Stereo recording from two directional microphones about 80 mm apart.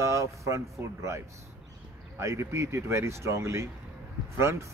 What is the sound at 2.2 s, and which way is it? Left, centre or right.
Speech, right.